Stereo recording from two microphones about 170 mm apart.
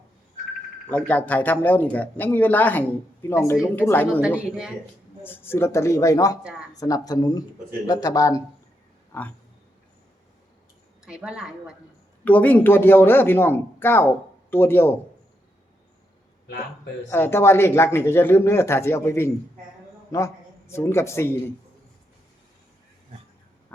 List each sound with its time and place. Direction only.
0.9 s speech: 10° left (ahead or behind)
4.4 s a woman's voice: 5° right (ahead or behind)
5.2 s speech: 10° left (ahead or behind)
11.0 s a woman's voice: 5° right (ahead or behind)
12.2 s speech: 10° left (ahead or behind)
17.1 s a man's voice: 15° left (ahead or behind)